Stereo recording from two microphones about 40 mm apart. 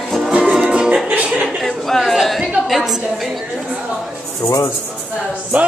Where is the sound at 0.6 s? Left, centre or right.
Right.